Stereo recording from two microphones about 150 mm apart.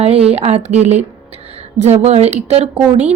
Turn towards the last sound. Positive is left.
turn(degrees=-45)  # may be behind; listen again after turning